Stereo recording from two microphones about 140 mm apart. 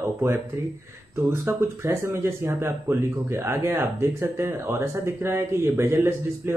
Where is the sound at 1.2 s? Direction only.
20° right (ahead or behind).